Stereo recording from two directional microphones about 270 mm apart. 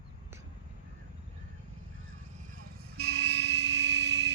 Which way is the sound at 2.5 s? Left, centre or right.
Right.